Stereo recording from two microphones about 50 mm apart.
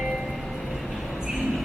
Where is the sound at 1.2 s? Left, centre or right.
Centre.